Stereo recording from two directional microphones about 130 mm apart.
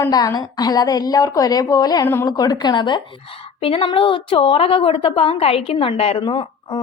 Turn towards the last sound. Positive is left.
turn(degrees=35)  # may be behind; listen again after turning